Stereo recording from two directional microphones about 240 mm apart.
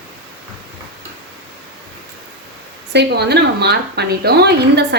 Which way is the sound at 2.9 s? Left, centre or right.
Right.